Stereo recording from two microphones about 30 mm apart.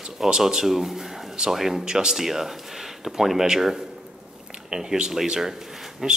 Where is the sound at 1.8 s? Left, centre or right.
Right.